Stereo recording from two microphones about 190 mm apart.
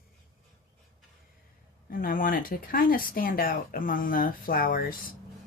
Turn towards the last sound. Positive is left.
turn(degrees=50)  # may be behind; listen again after turning